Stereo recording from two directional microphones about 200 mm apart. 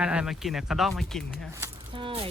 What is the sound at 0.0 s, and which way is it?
Speech, 5° right (ahead or behind).